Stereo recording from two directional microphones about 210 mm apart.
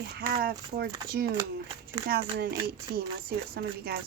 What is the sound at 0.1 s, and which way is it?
Speech, 45° right (ahead or behind).